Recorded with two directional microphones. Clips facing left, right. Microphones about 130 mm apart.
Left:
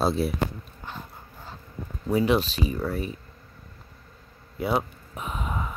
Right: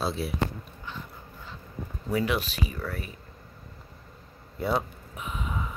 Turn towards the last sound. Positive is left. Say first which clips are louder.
# left 3 dB
turn(degrees=55)  # may be behind; listen again after turning